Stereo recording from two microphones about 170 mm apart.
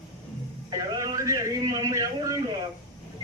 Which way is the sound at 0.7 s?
20° right (ahead or behind).